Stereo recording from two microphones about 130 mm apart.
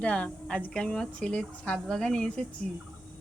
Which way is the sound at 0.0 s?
10° left (ahead or behind).